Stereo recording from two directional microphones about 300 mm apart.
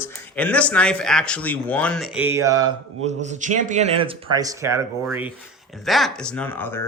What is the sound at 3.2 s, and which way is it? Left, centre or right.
Speech, right.